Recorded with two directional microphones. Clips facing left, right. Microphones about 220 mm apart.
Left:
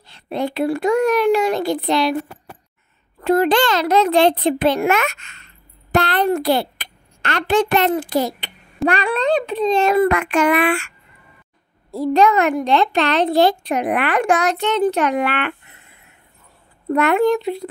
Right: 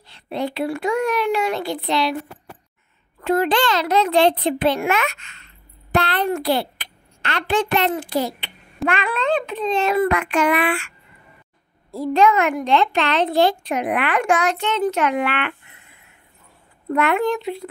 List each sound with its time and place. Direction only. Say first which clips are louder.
0.0 s a child's voice: left 2 dB; 45° left (ahead or behind)
3.2 s a child's voice: left 3 dB; 40° left (ahead or behind)
12.1 s a child's voice: left 2 dB; 40° left (ahead or behind)
16.9 s a child's voice: left 4 dB; 40° left (ahead or behind)